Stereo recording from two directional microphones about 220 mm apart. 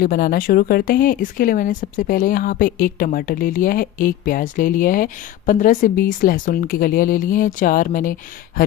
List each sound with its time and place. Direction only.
0.0 s speech: 40° left (ahead or behind)